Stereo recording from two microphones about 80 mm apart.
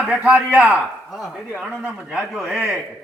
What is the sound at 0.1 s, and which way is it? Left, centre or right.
Speech, centre.